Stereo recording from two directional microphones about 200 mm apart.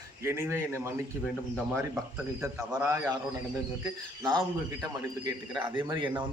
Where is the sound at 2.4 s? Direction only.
15° right (ahead or behind).